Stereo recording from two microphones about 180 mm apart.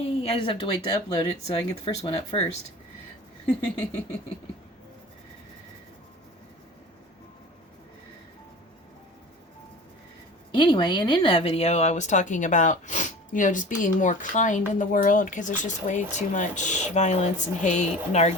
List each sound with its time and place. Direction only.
0.0 s speech: 35° left (ahead or behind)
3.4 s a sound: 10° left (ahead or behind)
10.5 s speech: 25° left (ahead or behind)